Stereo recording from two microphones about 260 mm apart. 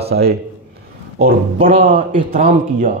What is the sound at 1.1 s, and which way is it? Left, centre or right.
A man's voice, right.